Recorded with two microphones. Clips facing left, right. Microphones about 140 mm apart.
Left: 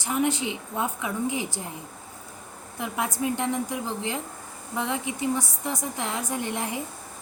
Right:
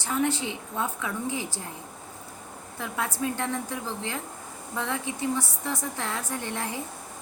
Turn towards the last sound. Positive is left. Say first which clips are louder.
# left 3 dB
turn(degrees=15)  # may be behind; listen again after turning